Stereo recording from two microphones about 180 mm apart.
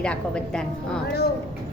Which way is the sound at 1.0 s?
60° left (ahead or behind).